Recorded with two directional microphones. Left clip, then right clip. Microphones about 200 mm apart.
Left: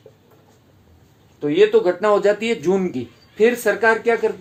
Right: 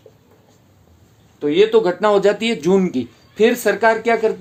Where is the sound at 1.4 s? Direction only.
40° right (ahead or behind).